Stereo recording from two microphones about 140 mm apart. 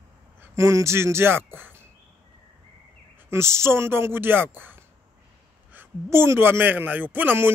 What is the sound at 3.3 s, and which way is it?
A man's voice, 20° right (ahead or behind).